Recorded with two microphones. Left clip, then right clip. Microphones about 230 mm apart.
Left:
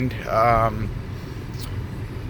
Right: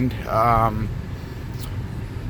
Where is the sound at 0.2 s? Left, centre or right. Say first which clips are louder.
Even; centre.